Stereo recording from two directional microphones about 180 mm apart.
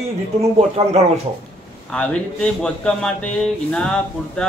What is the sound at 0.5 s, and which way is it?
Speech, 35° right (ahead or behind).